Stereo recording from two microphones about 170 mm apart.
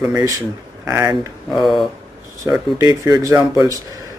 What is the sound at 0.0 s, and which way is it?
A man's voice, 20° right (ahead or behind).